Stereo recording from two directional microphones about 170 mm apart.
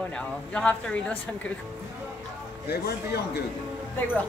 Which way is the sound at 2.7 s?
70° left (ahead or behind).